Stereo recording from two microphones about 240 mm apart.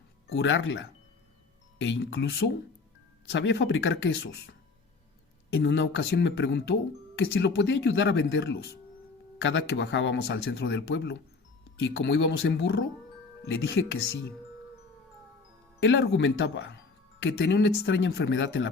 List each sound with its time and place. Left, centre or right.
0.3 s speech: left
1.8 s speech: left
5.5 s speech: left
15.8 s speech: left